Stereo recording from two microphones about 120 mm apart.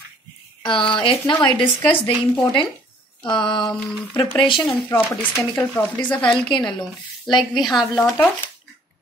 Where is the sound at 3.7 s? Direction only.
10° left (ahead or behind).